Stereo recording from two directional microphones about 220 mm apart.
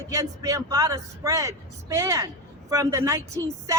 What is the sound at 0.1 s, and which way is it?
Speech, 15° right (ahead or behind).